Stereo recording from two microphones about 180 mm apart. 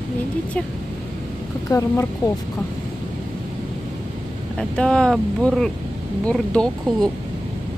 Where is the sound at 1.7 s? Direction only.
15° left (ahead or behind).